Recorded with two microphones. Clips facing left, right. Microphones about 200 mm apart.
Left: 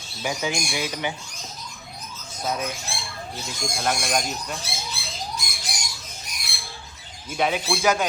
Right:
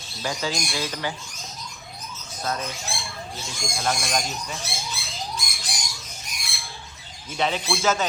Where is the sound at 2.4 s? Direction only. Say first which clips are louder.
Left 2 dB; 10° left (ahead or behind).